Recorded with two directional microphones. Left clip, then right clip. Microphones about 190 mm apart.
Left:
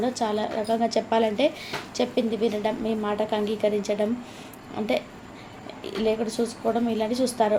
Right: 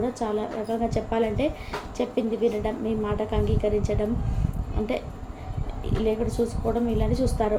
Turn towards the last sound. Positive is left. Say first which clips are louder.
# left 2 dB
turn(degrees=20)  # may be behind; listen again after turning